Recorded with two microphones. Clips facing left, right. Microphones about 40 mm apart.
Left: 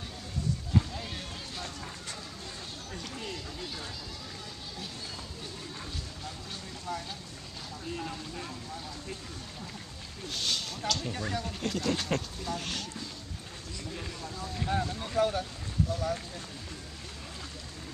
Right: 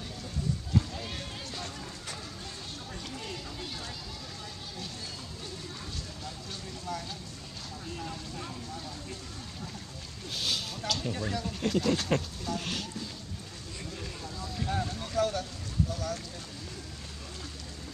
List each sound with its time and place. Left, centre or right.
1.0 s music: centre
2.9 s a sound: centre
6.9 s speech: centre
10.3 s speech: centre
13.9 s a sound: centre
15.9 s speech: centre